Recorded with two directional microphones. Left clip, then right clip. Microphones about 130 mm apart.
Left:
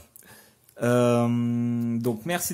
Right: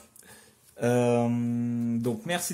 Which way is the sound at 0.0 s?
25° left (ahead or behind).